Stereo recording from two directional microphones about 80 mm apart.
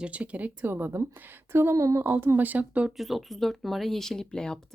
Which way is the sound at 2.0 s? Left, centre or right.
Right.